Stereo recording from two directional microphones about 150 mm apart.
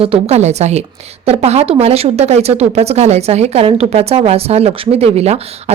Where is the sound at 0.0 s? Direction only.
40° right (ahead or behind).